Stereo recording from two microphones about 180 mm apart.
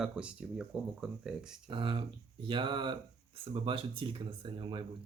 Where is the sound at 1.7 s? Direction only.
30° right (ahead or behind).